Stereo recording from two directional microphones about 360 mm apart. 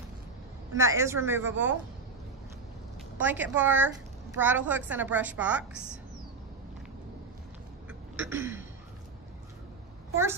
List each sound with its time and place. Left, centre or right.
0.7 s speech: centre
3.2 s a woman's voice: centre
8.2 s throat clearing: centre